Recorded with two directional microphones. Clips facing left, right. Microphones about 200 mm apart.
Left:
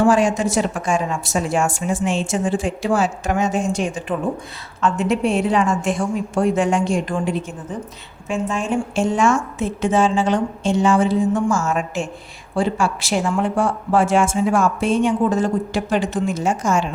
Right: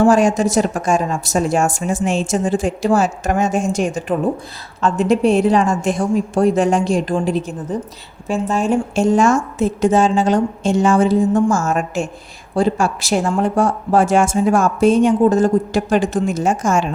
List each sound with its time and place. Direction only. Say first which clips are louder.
0.0 s a woman's voice: right 3 dB; 40° right (ahead or behind)